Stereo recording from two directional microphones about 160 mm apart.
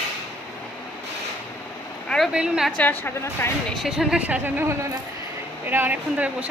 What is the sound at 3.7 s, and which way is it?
A woman's voice, centre (ahead or behind).